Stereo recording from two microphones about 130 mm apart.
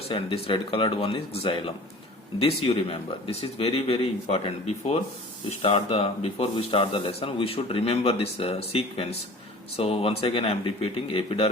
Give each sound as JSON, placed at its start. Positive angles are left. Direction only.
{"t": 0.1, "sound": "speech", "side_deg": 45}